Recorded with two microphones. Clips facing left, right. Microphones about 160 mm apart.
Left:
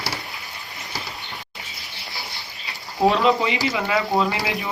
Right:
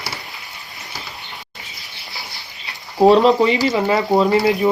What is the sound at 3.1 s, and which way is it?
Speech, 40° right (ahead or behind).